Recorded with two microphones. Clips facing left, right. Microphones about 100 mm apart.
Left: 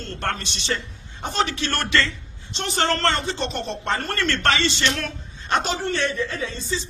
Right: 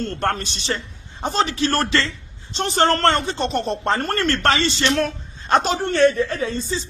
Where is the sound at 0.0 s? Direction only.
45° right (ahead or behind).